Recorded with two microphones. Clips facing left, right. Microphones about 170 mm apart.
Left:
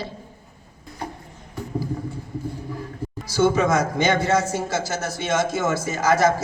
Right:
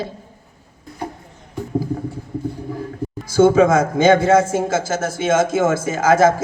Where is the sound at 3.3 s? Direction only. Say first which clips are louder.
Right 7 dB; 55° right (ahead or behind).